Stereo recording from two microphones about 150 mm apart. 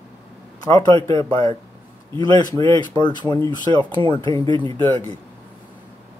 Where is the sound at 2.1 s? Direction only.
25° left (ahead or behind).